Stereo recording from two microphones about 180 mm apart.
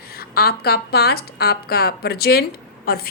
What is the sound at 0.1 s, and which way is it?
A woman's voice, 60° left (ahead or behind).